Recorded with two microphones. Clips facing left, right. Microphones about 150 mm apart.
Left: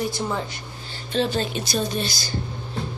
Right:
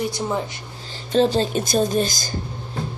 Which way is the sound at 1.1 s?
35° right (ahead or behind).